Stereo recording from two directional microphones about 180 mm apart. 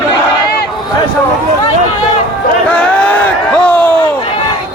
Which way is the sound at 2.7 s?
5° left (ahead or behind).